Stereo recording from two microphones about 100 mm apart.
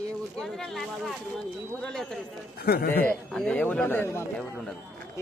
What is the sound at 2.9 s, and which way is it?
A man's voice, 15° left (ahead or behind).